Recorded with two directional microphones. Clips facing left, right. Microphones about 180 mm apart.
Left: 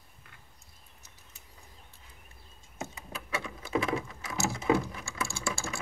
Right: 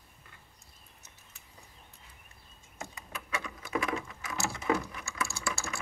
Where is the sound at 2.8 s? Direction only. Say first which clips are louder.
Left 3 dB; 25° left (ahead or behind).